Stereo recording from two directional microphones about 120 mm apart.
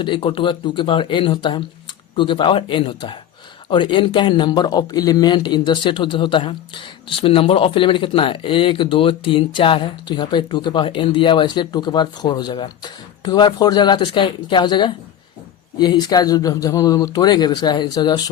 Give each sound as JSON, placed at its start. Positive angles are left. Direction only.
{"t": 0.0, "sound": "speech", "side_deg": 45}